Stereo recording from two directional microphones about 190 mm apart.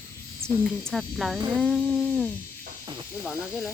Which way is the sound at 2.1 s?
10° left (ahead or behind).